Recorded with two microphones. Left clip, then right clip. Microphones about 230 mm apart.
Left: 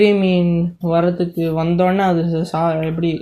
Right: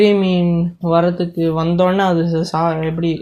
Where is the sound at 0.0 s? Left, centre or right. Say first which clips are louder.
Right 1 dB; right.